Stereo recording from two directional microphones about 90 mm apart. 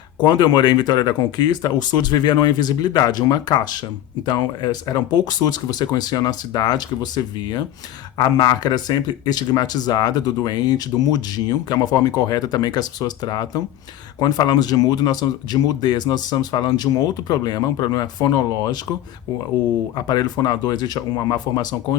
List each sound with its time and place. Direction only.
0.2 s speech: 50° left (ahead or behind)
8.2 s speech: 50° left (ahead or behind)
20.1 s speech: 50° left (ahead or behind)